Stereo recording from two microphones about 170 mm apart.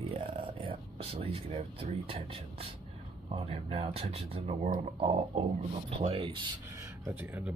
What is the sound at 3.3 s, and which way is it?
Speech, 35° right (ahead or behind).